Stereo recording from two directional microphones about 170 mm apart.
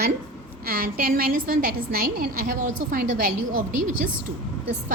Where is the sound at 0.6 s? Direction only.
60° right (ahead or behind).